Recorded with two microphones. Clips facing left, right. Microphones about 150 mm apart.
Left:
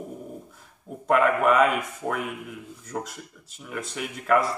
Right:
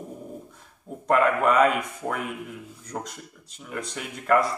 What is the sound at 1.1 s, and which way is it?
Speech, centre (ahead or behind).